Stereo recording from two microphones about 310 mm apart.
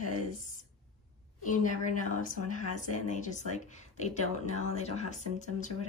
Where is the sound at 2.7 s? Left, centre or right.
Left.